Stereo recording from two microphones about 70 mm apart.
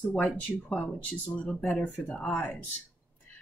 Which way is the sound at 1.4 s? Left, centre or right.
Left.